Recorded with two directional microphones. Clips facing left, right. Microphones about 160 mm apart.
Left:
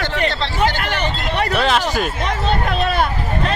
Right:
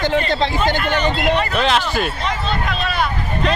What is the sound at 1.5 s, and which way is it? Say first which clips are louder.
Speech: even; 5° left (ahead or behind).